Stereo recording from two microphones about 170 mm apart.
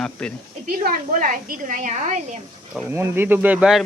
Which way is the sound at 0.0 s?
5° left (ahead or behind).